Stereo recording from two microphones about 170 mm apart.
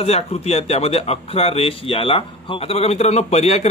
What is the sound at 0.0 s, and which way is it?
A man's voice, 35° left (ahead or behind).